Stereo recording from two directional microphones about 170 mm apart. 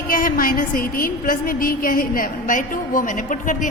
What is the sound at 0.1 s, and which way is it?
A woman's voice, 55° left (ahead or behind).